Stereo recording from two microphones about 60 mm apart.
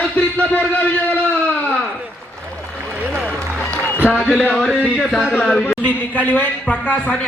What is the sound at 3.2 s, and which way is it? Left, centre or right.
Applause, left.